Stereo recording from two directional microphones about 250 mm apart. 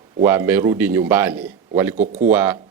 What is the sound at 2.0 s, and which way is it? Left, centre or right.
Speech, right.